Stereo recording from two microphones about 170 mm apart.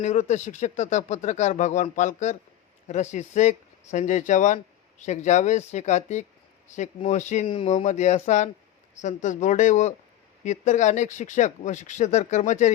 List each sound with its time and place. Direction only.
0.0 s speech: 45° left (ahead or behind)
7.4 s speech: 30° left (ahead or behind)
7.7 s speech: 45° left (ahead or behind)